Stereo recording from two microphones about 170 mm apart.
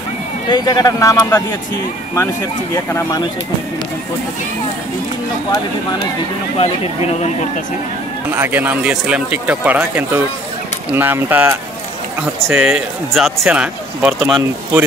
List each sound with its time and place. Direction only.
0.5 s a man's voice: 25° left (ahead or behind)
2.7 s a man's voice: 20° left (ahead or behind)
6.6 s speech: 40° left (ahead or behind)
8.3 s speech: 10° right (ahead or behind)
14.3 s speech: 15° right (ahead or behind)